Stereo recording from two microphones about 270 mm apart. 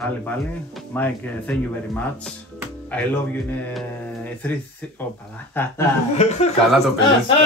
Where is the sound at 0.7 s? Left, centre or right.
Centre.